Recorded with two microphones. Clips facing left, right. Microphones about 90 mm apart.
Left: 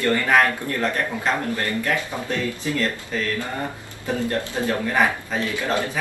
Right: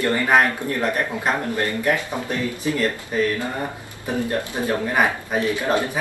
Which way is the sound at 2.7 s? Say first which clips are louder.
Right 3 dB; 20° right (ahead or behind).